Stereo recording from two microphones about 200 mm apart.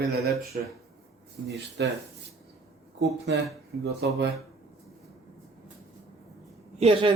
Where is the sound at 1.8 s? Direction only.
60° right (ahead or behind).